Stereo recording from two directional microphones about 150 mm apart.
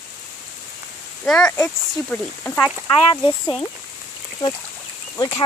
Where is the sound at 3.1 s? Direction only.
25° left (ahead or behind).